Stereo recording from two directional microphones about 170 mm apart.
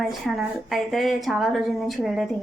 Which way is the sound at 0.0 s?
Centre (ahead or behind).